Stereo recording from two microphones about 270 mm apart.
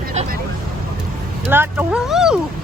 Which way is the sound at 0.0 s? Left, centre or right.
Right.